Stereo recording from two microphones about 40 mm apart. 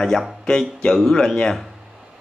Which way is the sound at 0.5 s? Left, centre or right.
Centre.